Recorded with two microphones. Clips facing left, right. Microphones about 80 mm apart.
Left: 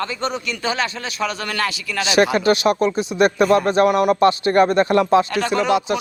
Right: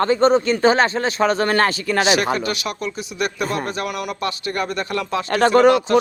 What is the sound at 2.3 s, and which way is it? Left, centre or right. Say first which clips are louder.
Speech: left 8 dB; left.